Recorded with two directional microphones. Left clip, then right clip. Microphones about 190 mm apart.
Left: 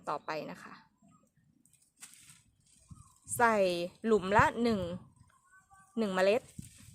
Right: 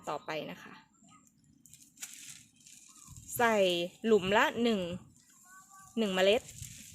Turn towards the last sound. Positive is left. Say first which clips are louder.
# right 1 dB
turn(degrees=-5)  # may be behind; listen again after turning